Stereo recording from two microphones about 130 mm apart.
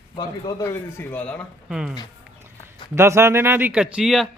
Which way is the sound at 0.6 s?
20° left (ahead or behind).